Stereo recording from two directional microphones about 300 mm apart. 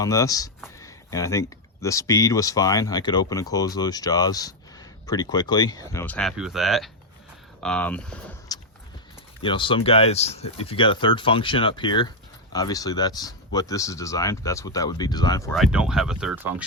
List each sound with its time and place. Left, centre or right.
0.0 s speech: centre
9.4 s speech: centre
15.5 s speech: centre